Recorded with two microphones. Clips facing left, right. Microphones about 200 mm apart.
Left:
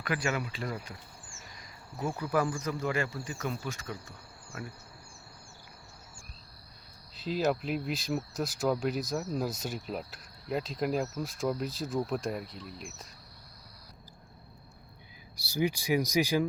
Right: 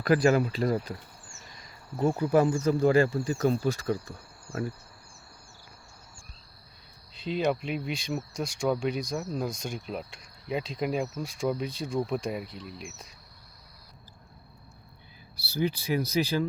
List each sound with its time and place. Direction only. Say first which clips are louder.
0.0 s speech: right 10 dB; 40° right (ahead or behind)
2.0 s speech: right 7 dB; 25° right (ahead or behind)
7.2 s speech: right 2 dB; 5° left (ahead or behind)
15.4 s speech: right 1 dB; 15° left (ahead or behind)